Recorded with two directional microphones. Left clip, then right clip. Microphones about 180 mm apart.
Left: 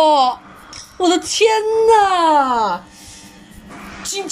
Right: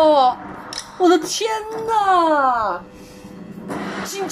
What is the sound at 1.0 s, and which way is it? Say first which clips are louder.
A woman's voice: left 2 dB; 5° left (ahead or behind).